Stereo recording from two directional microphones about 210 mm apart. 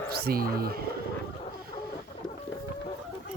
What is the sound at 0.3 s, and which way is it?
Speech, 45° right (ahead or behind).